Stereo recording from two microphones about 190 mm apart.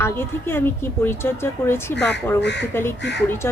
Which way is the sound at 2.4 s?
65° left (ahead or behind).